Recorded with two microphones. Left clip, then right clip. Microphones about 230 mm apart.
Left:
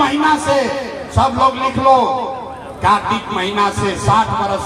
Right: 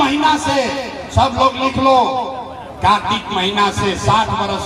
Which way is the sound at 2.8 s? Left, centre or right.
Right.